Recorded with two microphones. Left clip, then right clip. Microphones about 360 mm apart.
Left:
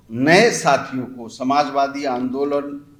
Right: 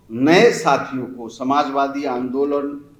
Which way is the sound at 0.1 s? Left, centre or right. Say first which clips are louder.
Right 1 dB; left.